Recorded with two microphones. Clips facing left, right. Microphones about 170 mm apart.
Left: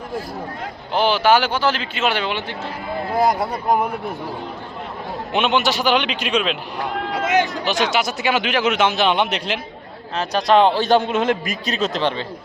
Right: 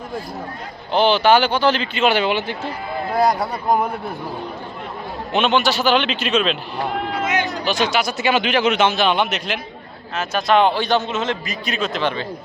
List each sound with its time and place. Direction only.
0.9 s speech: 10° left (ahead or behind); by 2.6 s 5° right (ahead or behind)
5.3 s speech: 15° left (ahead or behind)
7.6 s speech: 20° left (ahead or behind)
8.3 s a man's voice: 5° left (ahead or behind); by 11.5 s 55° left (ahead or behind)
11.6 s a man's voice: 35° left (ahead or behind)